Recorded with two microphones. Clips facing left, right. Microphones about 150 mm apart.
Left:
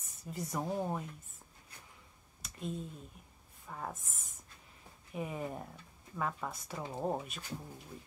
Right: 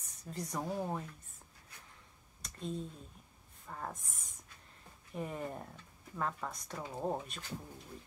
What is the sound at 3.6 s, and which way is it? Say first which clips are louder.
Speech: left 1 dB; 5° left (ahead or behind).